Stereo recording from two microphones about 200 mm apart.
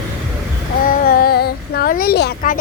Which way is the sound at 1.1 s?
50° left (ahead or behind).